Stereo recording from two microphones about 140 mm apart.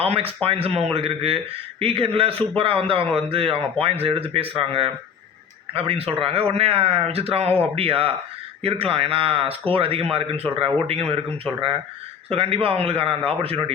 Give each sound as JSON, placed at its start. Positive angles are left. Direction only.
{"t": 0.0, "sound": "speech", "side_deg": -45}
{"t": 12.3, "sound": "speech", "side_deg": -45}